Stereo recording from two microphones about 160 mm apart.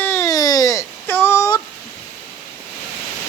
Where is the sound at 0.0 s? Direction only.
15° left (ahead or behind).